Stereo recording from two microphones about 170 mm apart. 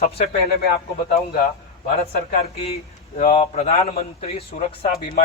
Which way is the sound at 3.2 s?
40° left (ahead or behind).